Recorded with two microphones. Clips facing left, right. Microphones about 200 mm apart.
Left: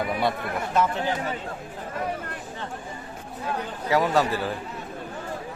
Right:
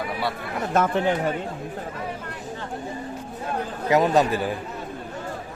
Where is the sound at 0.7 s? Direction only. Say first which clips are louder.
Right 3 dB; 50° right (ahead or behind).